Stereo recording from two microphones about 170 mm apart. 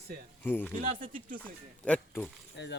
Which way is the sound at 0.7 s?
50° right (ahead or behind).